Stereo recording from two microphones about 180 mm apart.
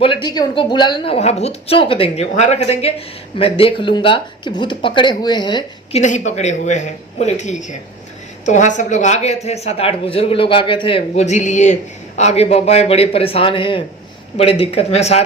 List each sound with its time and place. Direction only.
0.0 s a woman's voice: 25° left (ahead or behind)
6.0 s a woman's voice: 40° left (ahead or behind)